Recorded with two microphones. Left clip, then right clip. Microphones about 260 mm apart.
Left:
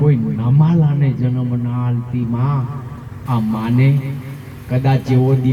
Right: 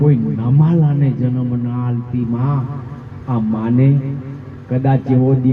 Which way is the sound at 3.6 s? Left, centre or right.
Left.